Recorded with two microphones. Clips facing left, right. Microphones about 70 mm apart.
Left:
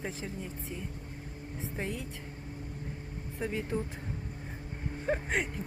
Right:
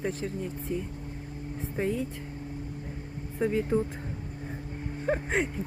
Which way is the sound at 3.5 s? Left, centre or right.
Centre.